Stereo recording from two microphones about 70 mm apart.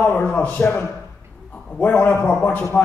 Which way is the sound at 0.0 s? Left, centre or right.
Centre.